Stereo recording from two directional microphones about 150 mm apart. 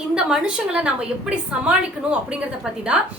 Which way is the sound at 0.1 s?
5° right (ahead or behind).